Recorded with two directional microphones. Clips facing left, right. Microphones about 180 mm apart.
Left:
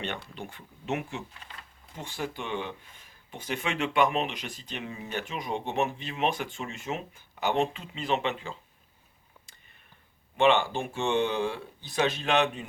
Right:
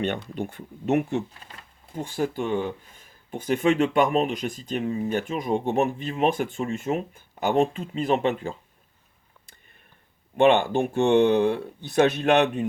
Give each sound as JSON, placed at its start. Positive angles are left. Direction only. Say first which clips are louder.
{"t": 0.3, "sound": "speech", "louder": "right 10 dB", "side_deg": -45}
{"t": 10.3, "sound": "speech", "louder": "right 5 dB", "side_deg": -55}